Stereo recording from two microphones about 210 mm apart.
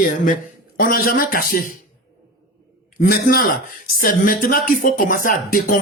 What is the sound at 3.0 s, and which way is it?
A man's voice, 45° left (ahead or behind).